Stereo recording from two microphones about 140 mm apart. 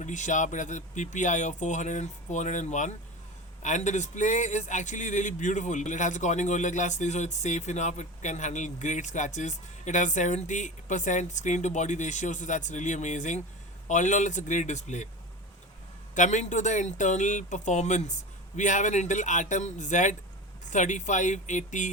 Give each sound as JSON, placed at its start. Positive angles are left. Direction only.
{"t": 0.0, "sound": "music", "side_deg": 60}
{"t": 16.1, "sound": "music", "side_deg": 60}